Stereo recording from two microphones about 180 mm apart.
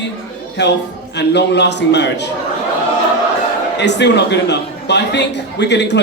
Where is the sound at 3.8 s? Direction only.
75° left (ahead or behind).